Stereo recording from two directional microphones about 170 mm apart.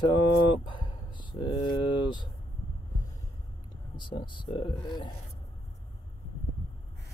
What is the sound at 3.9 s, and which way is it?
Speech, 25° left (ahead or behind).